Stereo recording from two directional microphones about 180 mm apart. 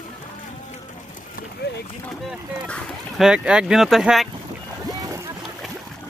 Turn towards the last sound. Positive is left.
turn(degrees=-20)  # may be behind; listen again after turning